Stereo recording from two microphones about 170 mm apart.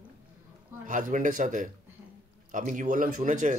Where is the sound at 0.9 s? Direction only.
50° right (ahead or behind).